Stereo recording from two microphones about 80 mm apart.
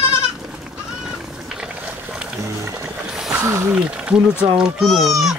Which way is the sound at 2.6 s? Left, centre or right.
Right.